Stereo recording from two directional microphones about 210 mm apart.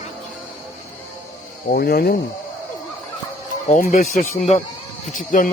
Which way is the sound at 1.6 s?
45° left (ahead or behind).